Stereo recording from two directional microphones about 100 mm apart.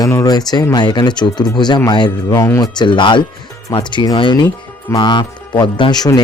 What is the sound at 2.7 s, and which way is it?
Speech, 55° left (ahead or behind).